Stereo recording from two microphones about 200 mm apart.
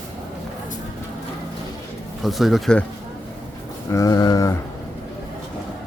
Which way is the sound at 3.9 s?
15° left (ahead or behind).